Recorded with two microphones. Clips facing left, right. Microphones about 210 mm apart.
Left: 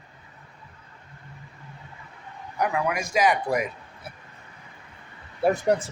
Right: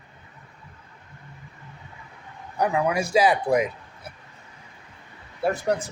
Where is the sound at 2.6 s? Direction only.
30° right (ahead or behind).